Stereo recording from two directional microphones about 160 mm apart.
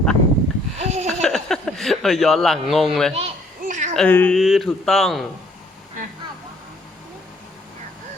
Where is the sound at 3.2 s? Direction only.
45° right (ahead or behind).